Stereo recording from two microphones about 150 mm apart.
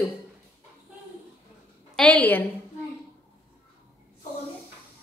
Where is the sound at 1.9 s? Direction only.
10° left (ahead or behind).